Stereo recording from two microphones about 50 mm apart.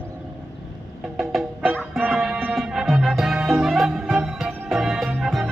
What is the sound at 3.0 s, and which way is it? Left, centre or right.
Music, centre.